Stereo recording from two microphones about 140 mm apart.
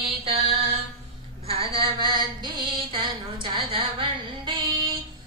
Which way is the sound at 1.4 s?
40° right (ahead or behind).